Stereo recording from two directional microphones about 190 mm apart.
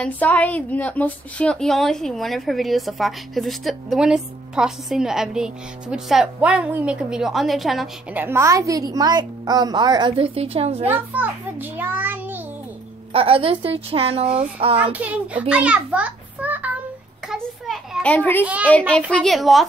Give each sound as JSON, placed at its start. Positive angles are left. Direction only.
{"t": 0.0, "sound": "a woman's voice", "side_deg": 10}
{"t": 10.9, "sound": "a child's voice", "side_deg": -10}
{"t": 13.1, "sound": "speech", "side_deg": -30}
{"t": 14.8, "sound": "a child's voice", "side_deg": -10}
{"t": 17.3, "sound": "children playing", "side_deg": 0}
{"t": 18.4, "sound": "a child's voice", "side_deg": -5}
{"t": 18.7, "sound": "a woman's voice", "side_deg": 5}